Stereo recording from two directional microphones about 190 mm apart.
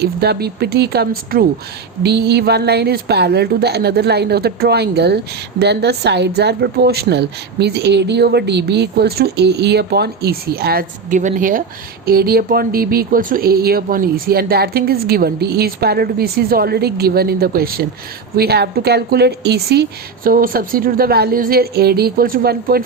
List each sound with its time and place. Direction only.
0.0 s a woman's voice: 55° right (ahead or behind)